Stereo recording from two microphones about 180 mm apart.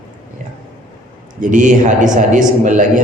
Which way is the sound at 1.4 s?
45° right (ahead or behind).